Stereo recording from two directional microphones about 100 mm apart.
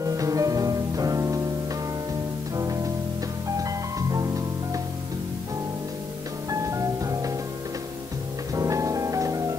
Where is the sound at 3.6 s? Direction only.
35° right (ahead or behind).